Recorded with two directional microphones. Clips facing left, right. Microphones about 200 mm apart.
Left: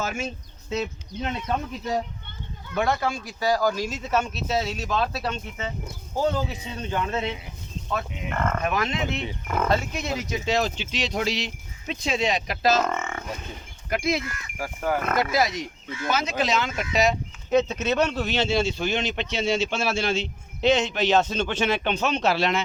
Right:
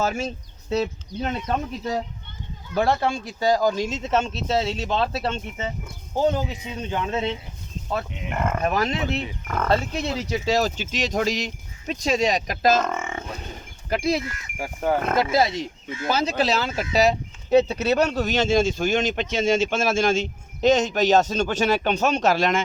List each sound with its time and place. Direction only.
0.0 s speech: 35° right (ahead or behind)
2.7 s speech: 30° right (ahead or behind); by 8.6 s 15° right (ahead or behind)
8.6 s speech: 35° right (ahead or behind)
12.9 s grunt: 10° right (ahead or behind)
13.9 s speech: 30° right (ahead or behind)